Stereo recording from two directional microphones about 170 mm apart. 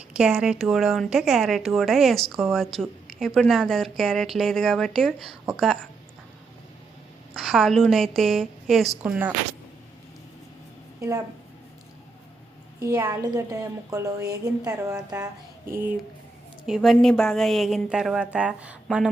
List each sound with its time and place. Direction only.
0.1 s a woman's voice: 5° right (ahead or behind)
7.3 s a woman's voice: centre (ahead or behind)
12.8 s a woman's voice: 10° right (ahead or behind)
16.6 s a woman's voice: centre (ahead or behind)